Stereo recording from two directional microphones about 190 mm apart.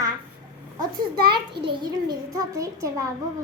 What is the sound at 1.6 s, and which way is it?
A child's voice, 25° right (ahead or behind).